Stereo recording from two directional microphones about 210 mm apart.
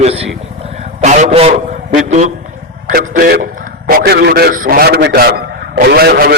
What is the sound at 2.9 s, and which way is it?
A man's voice, 45° right (ahead or behind).